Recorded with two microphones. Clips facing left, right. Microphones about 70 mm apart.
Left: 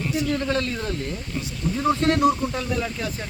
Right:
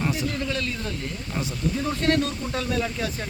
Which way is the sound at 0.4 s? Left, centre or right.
Left.